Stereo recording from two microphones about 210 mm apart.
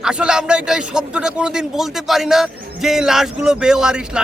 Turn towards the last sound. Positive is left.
turn(degrees=-5)  # may be behind; listen again after turning